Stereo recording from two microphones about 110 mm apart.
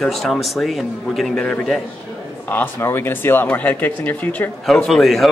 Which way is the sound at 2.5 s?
20° left (ahead or behind).